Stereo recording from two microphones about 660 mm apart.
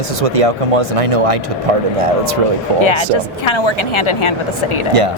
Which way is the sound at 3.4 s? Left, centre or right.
Left.